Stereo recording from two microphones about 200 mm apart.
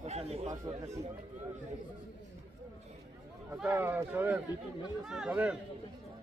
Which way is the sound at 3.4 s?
10° right (ahead or behind).